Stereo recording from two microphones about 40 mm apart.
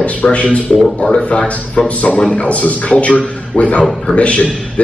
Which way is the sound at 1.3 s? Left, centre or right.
Left.